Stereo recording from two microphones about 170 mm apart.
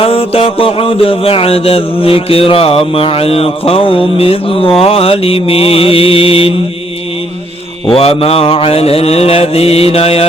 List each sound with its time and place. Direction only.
0.0 s mantra: 35° left (ahead or behind)
7.9 s mantra: 30° left (ahead or behind)